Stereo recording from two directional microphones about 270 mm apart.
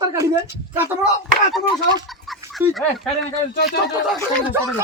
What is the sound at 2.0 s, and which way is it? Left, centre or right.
Chicken, centre.